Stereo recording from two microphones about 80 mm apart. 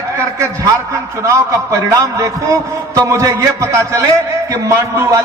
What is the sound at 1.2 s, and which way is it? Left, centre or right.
A man's voice, right.